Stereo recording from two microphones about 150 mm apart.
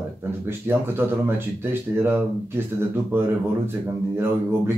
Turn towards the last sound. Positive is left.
turn(degrees=-15)  # may be behind; listen again after turning